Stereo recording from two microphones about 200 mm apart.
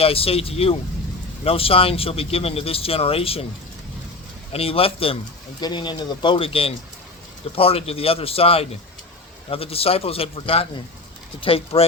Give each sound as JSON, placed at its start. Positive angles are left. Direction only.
{"t": 0.0, "sound": "speech", "side_deg": 30}
{"t": 4.5, "sound": "speech", "side_deg": 30}